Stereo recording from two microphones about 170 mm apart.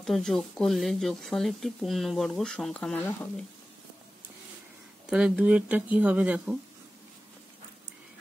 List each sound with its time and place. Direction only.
0.0 s speech: centre (ahead or behind)
5.1 s speech: 5° right (ahead or behind)